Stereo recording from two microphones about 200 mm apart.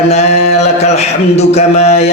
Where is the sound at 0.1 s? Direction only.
30° left (ahead or behind).